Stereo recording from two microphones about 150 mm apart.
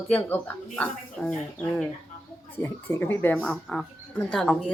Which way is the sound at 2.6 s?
15° left (ahead or behind).